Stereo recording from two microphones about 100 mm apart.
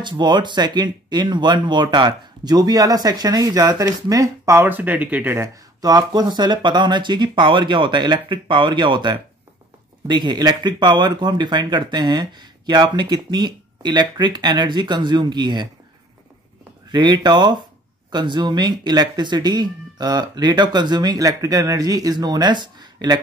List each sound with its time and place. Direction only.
0.0 s speech: 50° right (ahead or behind); by 5.5 s 20° right (ahead or behind)
5.8 s speech: 40° right (ahead or behind)
16.9 s speech: 50° right (ahead or behind)